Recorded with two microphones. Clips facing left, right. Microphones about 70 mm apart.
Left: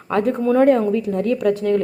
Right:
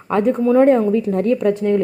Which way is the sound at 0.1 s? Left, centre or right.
Right.